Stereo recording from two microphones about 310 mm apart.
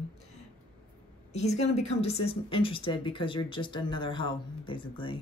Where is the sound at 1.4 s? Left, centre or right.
Left.